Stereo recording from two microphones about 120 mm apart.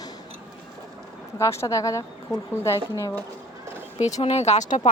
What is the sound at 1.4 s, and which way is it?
A woman's voice, 25° left (ahead or behind).